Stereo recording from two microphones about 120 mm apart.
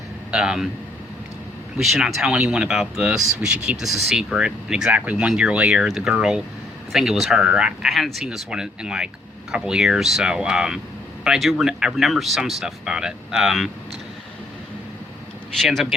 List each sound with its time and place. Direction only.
0.3 s speech: 5° right (ahead or behind)
1.8 s speech: centre (ahead or behind)
15.6 s speech: centre (ahead or behind)